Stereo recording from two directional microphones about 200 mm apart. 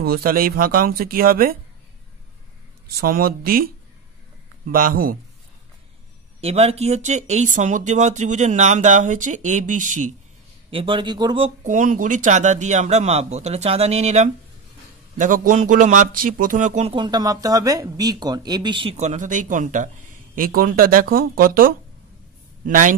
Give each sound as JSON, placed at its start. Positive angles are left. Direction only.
{"t": 0.0, "sound": "speech", "side_deg": -50}
{"t": 3.0, "sound": "speech", "side_deg": -50}
{"t": 6.4, "sound": "a man's voice", "side_deg": -30}
{"t": 10.7, "sound": "speech", "side_deg": -25}
{"t": 11.6, "sound": "a man's voice", "side_deg": -40}